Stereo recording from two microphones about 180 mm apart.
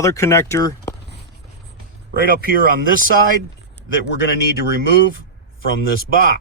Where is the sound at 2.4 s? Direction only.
55° right (ahead or behind).